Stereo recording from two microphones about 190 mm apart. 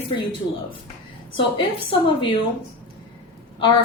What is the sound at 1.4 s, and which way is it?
Speech, 30° left (ahead or behind).